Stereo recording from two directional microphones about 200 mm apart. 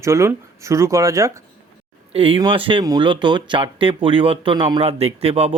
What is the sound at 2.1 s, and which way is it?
Speech, 25° right (ahead or behind).